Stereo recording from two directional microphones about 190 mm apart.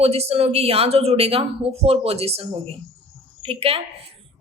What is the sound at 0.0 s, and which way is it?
Speech, 30° right (ahead or behind).